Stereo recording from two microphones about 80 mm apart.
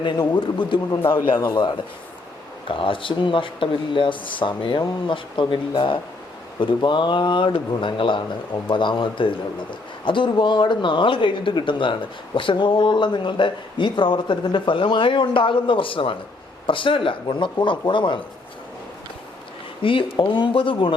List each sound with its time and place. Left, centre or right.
0.3 s a man's voice: left
2.6 s speech: left
19.8 s speech: left